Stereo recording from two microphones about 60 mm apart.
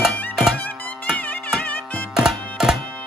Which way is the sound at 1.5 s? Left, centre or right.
Left.